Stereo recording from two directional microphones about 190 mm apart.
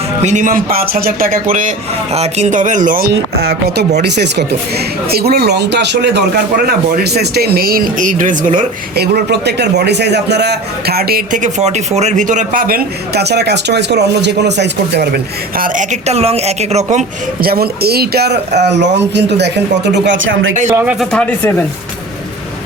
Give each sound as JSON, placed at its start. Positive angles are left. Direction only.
{"t": 0.2, "sound": "speech", "side_deg": -40}
{"t": 17.4, "sound": "speech", "side_deg": -55}
{"t": 20.7, "sound": "a man's voice", "side_deg": -10}
{"t": 21.0, "sound": "speech", "side_deg": 5}